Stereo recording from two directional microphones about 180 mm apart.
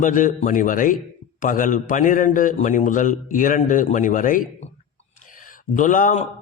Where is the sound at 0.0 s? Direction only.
45° left (ahead or behind).